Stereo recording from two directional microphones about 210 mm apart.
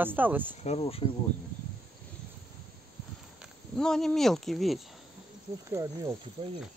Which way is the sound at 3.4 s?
Centre (ahead or behind).